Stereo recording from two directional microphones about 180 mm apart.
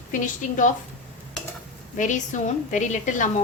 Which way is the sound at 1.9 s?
45° left (ahead or behind).